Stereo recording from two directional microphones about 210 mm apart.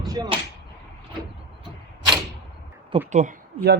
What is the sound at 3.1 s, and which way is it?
Speech, 35° right (ahead or behind).